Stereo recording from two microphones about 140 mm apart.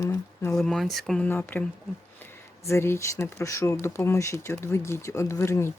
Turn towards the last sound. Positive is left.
turn(degrees=20)  # may be behind; listen again after turning